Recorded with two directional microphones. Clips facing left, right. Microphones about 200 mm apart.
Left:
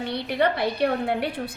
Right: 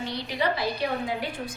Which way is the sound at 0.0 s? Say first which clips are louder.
Left 4 dB; 60° left (ahead or behind).